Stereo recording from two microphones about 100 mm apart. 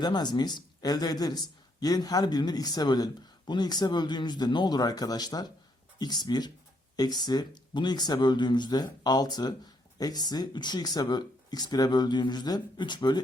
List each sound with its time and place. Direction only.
0.0 s speech: 45° left (ahead or behind)